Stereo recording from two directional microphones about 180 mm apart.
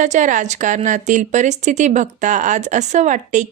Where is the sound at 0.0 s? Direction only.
45° right (ahead or behind).